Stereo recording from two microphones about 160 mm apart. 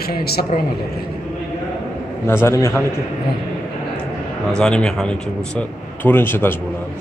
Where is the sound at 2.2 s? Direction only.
15° left (ahead or behind).